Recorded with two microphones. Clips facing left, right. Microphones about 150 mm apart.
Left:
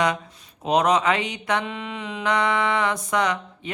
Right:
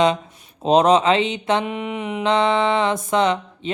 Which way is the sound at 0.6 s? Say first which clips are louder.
Right 5 dB; 30° right (ahead or behind).